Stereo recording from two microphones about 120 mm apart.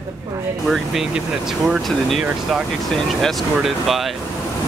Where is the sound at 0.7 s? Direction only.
5° right (ahead or behind).